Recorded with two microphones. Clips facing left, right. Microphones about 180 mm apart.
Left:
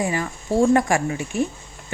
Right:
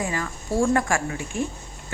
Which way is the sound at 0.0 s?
20° left (ahead or behind).